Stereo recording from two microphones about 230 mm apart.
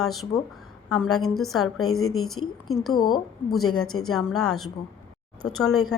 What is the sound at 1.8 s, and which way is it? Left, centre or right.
Speech, left.